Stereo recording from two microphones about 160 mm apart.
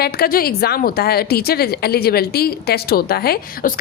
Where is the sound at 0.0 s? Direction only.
70° left (ahead or behind).